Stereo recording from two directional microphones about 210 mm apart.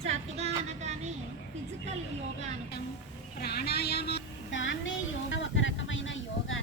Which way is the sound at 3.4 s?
50° left (ahead or behind).